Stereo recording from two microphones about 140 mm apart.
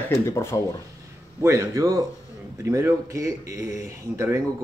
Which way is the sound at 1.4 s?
20° right (ahead or behind).